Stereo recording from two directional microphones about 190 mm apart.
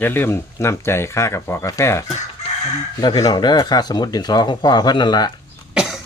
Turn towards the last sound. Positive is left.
turn(degrees=0)  # may be behind; listen again after turning